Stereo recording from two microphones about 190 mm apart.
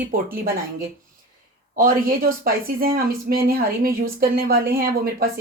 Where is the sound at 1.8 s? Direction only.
50° right (ahead or behind).